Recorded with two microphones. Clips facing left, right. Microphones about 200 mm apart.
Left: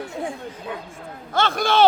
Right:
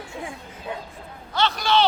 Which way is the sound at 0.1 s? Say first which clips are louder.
Left 5 dB; 35° left (ahead or behind).